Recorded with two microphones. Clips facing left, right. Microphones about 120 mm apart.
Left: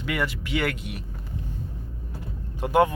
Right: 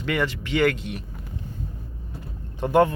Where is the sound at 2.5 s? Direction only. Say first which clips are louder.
Right 2 dB; 10° left (ahead or behind).